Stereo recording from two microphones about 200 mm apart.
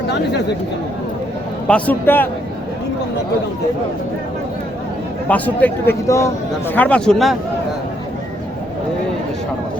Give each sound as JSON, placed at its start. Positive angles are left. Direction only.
{"t": 0.1, "sound": "speech", "side_deg": 60}
{"t": 1.6, "sound": "speech", "side_deg": 5}
{"t": 5.3, "sound": "speech", "side_deg": 10}